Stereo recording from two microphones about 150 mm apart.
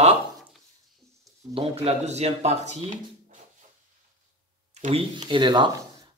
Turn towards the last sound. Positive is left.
turn(degrees=-30)  # may be behind; listen again after turning